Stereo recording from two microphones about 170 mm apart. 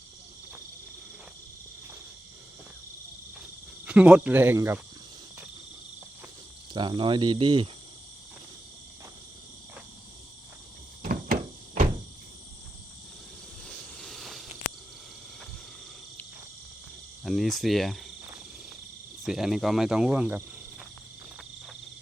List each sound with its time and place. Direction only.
3.8 s speech: 5° right (ahead or behind)
6.7 s cricket: 30° right (ahead or behind)
11.0 s a sound: 60° right (ahead or behind)
13.7 s a sound: 5° left (ahead or behind)
17.2 s cricket: centre (ahead or behind)
19.2 s cricket: centre (ahead or behind)